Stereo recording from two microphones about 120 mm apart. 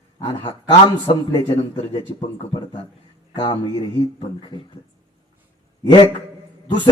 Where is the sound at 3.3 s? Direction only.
35° left (ahead or behind).